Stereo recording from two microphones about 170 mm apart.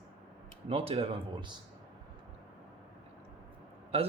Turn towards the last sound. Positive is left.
turn(degrees=-35)  # may be behind; listen again after turning